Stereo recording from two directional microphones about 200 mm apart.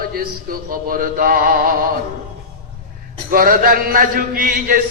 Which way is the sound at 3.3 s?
45° right (ahead or behind).